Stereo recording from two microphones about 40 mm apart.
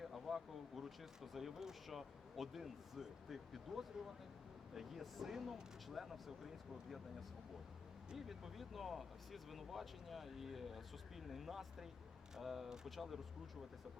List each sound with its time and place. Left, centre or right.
0.0 s speech: centre
8.1 s speech: centre